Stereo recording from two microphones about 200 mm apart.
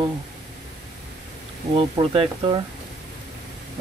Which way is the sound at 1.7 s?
25° right (ahead or behind).